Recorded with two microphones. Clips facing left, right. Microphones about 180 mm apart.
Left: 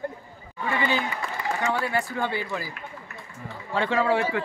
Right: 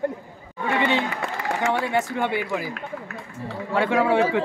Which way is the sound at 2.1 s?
15° right (ahead or behind).